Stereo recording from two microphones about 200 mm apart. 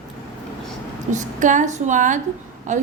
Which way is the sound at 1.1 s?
40° right (ahead or behind).